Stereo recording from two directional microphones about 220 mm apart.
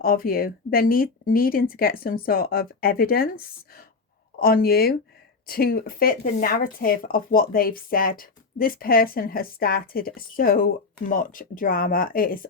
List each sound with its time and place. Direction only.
0.0 s speech: 40° left (ahead or behind)